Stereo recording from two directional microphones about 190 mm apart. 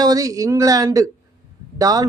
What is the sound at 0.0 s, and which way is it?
A man's voice, 20° right (ahead or behind).